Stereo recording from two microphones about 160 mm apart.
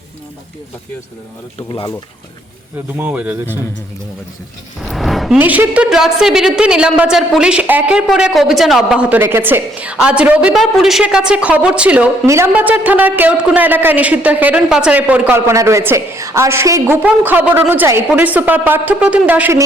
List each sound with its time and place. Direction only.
1.5 s speech: 30° left (ahead or behind)
3.0 s a man's voice: 10° right (ahead or behind)
4.8 s a sound: centre (ahead or behind)
5.4 s a man's voice: 10° right (ahead or behind)